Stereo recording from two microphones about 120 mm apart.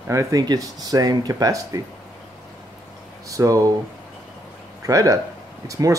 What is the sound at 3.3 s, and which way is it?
Speech, 25° right (ahead or behind).